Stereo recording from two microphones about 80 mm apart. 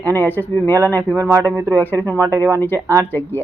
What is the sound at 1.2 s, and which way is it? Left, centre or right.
Speech, right.